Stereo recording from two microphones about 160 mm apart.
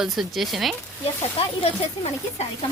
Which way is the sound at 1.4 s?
40° left (ahead or behind).